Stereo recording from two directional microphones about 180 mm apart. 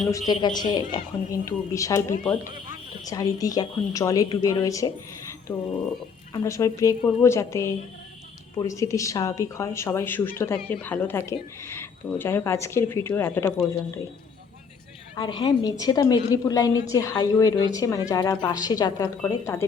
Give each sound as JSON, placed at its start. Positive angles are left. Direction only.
{"t": 0.3, "sound": "speech", "side_deg": 25}
{"t": 15.1, "sound": "speech", "side_deg": 25}